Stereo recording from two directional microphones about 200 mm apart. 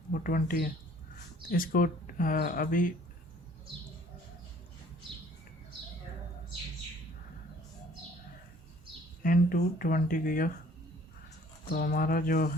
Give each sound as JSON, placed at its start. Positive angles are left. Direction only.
{"t": 0.1, "sound": "speech", "side_deg": 45}
{"t": 9.2, "sound": "speech", "side_deg": 45}
{"t": 11.7, "sound": "speech", "side_deg": 45}